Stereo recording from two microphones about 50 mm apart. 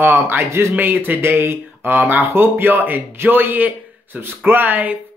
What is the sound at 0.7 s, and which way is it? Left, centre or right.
Speech, right.